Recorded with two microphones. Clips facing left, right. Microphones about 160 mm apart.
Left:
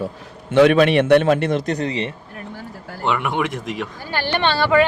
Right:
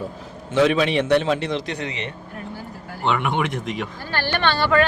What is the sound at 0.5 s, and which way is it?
A man's voice, 60° left (ahead or behind).